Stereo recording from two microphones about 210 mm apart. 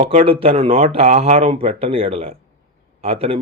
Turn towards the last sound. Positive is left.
turn(degrees=-25)  # may be behind; listen again after turning